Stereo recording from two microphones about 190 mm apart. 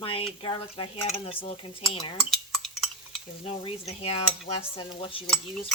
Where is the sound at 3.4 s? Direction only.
30° left (ahead or behind).